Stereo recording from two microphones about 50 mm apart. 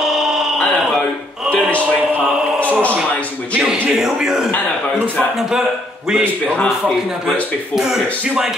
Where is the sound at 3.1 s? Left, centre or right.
Left.